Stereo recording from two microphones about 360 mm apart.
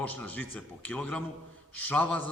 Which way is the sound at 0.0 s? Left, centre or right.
Centre.